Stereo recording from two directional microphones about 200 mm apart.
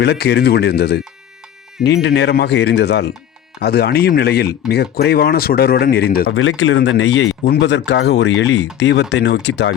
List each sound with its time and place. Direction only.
0.0 s speech: 55° left (ahead or behind)
6.2 s speech: 85° left; by 9.7 s 60° left (ahead or behind)